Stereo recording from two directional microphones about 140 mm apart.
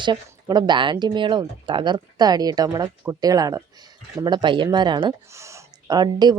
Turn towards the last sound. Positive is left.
turn(degrees=-30)  # may be behind; listen again after turning